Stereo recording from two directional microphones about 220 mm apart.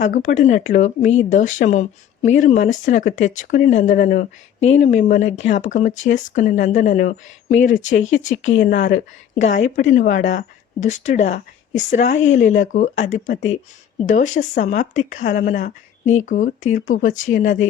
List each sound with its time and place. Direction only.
0.0 s speech: 35° left (ahead or behind)
8.2 s speech: 60° left (ahead or behind)
8.6 s speech: 40° left (ahead or behind)
9.4 s speech: 30° left (ahead or behind)